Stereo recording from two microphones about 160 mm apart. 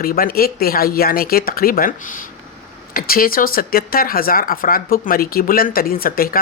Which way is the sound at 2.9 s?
65° left (ahead or behind).